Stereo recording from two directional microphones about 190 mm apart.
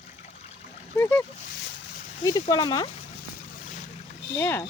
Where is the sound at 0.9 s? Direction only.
10° left (ahead or behind).